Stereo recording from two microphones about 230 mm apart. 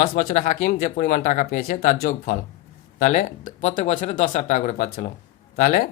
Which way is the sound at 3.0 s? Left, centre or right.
Left.